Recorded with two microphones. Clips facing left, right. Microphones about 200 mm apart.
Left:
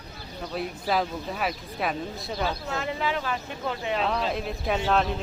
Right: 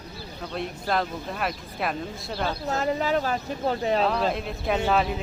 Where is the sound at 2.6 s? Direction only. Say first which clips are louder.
Right 4 dB; 40° right (ahead or behind).